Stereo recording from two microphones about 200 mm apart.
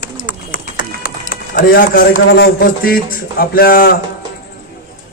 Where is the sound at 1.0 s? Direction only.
45° left (ahead or behind).